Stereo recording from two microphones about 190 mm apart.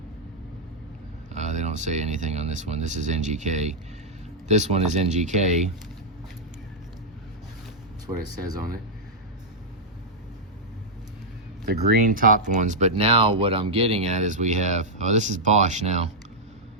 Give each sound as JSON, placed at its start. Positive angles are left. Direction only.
{"t": 1.3, "sound": "speech", "side_deg": -35}
{"t": 11.6, "sound": "speech", "side_deg": -55}